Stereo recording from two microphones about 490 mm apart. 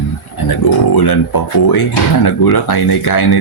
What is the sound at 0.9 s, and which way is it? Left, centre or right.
Speech, left.